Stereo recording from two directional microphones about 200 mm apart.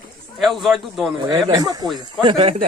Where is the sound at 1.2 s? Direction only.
20° right (ahead or behind).